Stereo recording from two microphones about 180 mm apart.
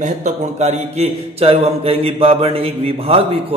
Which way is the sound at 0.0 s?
40° right (ahead or behind).